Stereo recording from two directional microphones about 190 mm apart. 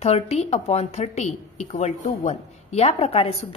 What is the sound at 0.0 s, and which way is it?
A woman's voice, 35° left (ahead or behind).